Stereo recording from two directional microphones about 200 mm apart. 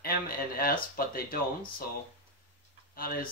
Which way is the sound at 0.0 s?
45° left (ahead or behind).